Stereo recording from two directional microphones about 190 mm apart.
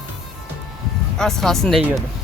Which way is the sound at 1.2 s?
Centre (ahead or behind).